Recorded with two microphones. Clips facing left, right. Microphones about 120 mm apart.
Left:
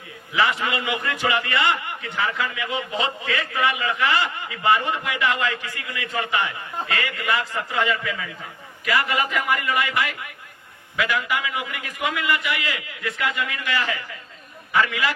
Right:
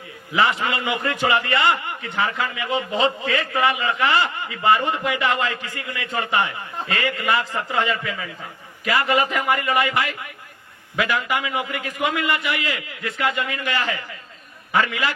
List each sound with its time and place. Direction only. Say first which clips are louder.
0.3 s a man's voice: right 2 dB; 30° right (ahead or behind)